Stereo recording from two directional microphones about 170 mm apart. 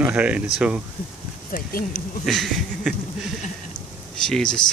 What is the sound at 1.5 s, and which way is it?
Speech, 50° left (ahead or behind).